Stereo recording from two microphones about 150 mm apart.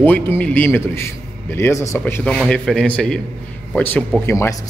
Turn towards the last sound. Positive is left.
turn(degrees=15)  # may be behind; listen again after turning